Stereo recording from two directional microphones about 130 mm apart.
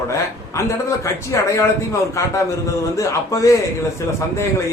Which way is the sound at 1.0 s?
25° left (ahead or behind).